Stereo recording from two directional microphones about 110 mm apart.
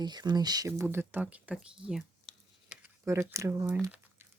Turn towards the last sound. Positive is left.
turn(degrees=-25)  # may be behind; listen again after turning